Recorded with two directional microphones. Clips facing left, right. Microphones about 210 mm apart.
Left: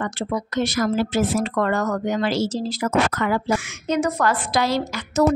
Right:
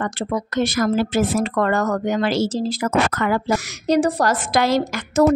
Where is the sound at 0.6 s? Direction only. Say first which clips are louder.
Right 2 dB; 50° right (ahead or behind).